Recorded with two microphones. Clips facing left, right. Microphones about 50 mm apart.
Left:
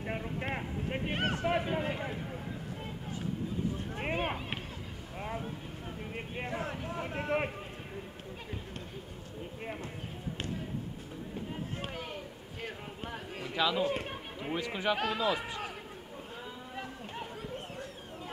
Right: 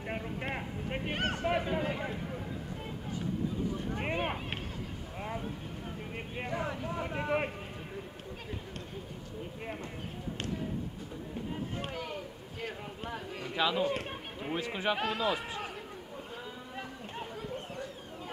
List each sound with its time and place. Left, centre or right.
0.0 s speech: centre
1.7 s a man's voice: left
3.9 s speech: centre
5.2 s vehicle: centre
6.1 s speech: centre
11.9 s a sound: left
13.6 s speech: centre
13.8 s speech: centre